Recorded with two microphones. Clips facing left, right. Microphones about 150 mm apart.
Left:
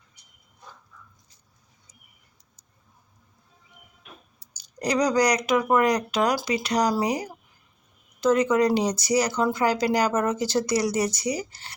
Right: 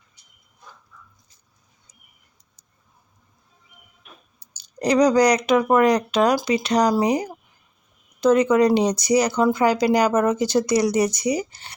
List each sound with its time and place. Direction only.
4.4 s speech: 25° right (ahead or behind)